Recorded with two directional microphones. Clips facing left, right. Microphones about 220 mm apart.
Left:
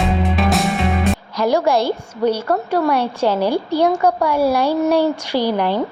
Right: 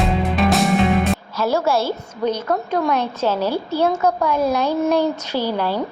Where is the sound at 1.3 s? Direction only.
15° left (ahead or behind).